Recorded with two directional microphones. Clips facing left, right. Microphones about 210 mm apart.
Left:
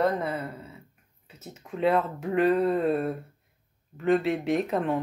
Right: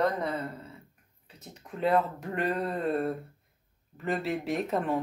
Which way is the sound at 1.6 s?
Centre (ahead or behind).